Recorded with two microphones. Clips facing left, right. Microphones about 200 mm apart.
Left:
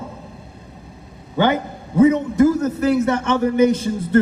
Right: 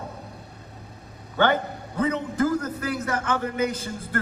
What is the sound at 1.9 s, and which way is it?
A man's voice, 25° left (ahead or behind).